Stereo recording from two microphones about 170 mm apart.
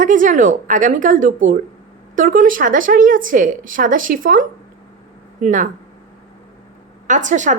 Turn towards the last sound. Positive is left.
turn(degrees=-45)  # may be behind; listen again after turning